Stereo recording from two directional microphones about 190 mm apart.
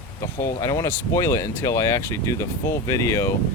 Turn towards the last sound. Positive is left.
turn(degrees=15)  # may be behind; listen again after turning